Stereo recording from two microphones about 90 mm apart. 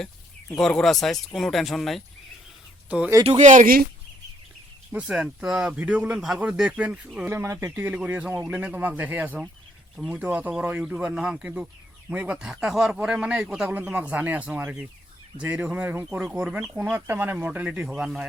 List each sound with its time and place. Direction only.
0.5 s speech: 5° left (ahead or behind)
2.9 s a man's voice: 15° right (ahead or behind)
4.9 s a man's voice: 10° right (ahead or behind)
7.3 s a man's voice: 30° right (ahead or behind)
17.7 s speech: 5° right (ahead or behind)